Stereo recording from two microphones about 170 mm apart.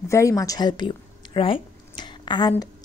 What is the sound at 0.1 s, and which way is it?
A woman's voice, 20° left (ahead or behind).